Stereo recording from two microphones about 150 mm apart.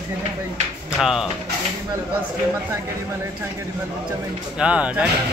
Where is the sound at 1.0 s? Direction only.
5° right (ahead or behind).